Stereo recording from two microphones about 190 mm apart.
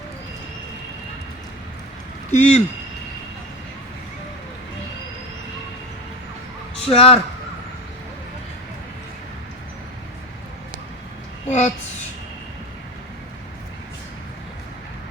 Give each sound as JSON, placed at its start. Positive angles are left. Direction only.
{"t": 2.3, "sound": "speech", "side_deg": 40}
{"t": 6.8, "sound": "speech", "side_deg": 30}
{"t": 11.4, "sound": "a child's voice", "side_deg": 35}